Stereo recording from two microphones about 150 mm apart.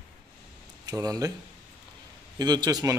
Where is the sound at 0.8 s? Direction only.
25° right (ahead or behind).